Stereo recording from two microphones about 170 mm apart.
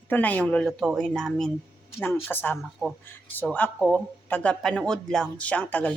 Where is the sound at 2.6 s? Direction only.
Centre (ahead or behind).